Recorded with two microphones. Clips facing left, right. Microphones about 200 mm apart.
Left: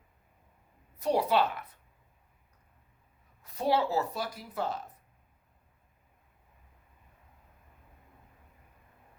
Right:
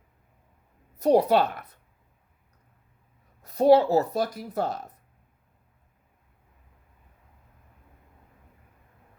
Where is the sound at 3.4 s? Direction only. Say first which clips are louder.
Right 10 dB; 40° right (ahead or behind).